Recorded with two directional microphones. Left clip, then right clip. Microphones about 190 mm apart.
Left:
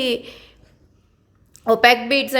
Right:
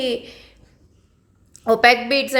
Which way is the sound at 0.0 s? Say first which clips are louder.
Left 1 dB; 15° left (ahead or behind).